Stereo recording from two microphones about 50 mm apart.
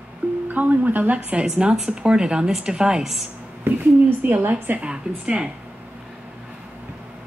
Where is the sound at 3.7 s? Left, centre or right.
Right.